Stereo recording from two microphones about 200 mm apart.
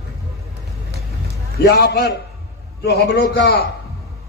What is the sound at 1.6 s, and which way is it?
A man's voice, 55° left (ahead or behind).